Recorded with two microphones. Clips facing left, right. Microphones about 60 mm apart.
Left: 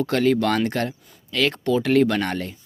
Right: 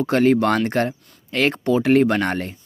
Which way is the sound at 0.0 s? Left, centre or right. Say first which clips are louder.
Right 3 dB; right.